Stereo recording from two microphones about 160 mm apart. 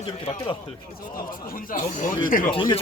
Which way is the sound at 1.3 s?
60° left (ahead or behind).